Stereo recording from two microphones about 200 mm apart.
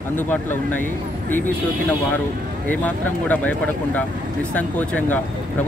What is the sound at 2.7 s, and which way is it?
Speech, 10° left (ahead or behind).